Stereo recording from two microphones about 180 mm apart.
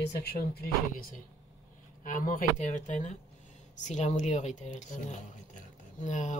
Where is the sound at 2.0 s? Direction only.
50° left (ahead or behind).